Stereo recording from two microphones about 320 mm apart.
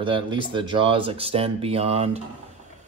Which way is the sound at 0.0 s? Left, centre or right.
Centre.